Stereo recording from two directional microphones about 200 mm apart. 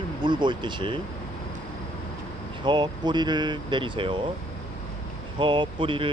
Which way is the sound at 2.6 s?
20° right (ahead or behind).